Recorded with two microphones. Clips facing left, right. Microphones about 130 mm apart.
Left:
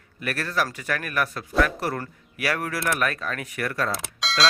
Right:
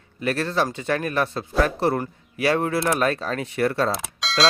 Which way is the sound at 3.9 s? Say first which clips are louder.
Right 2 dB; centre (ahead or behind).